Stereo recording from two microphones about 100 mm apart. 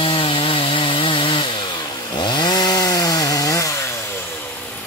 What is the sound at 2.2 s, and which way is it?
Chainsaw, 50° left (ahead or behind).